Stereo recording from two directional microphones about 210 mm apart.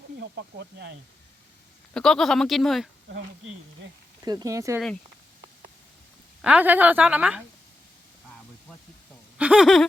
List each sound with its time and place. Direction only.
0.2 s speech: 50° right (ahead or behind)
1.9 s speech: 5° left (ahead or behind)
4.2 s a woman's voice: 15° right (ahead or behind)
6.4 s a woman's voice: 5° right (ahead or behind)
9.4 s a sound: 5° right (ahead or behind)